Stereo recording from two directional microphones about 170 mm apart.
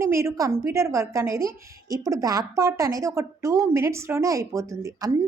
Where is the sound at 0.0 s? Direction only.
15° right (ahead or behind).